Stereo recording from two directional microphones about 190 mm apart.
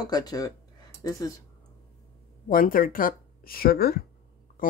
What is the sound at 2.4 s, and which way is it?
Speech, 45° left (ahead or behind).